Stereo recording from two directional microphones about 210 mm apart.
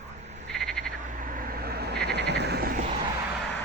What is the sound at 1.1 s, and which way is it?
Frog, 40° right (ahead or behind).